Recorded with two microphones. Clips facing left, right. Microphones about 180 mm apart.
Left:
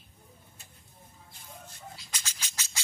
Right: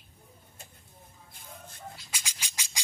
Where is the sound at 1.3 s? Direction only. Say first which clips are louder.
Right 1 dB; 55° right (ahead or behind).